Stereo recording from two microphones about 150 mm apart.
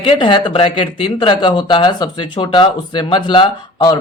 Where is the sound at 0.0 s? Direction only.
35° left (ahead or behind).